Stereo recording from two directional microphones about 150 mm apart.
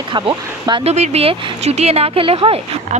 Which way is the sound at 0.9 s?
45° right (ahead or behind).